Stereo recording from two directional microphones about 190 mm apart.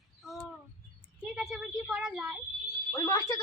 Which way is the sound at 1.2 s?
Centre (ahead or behind).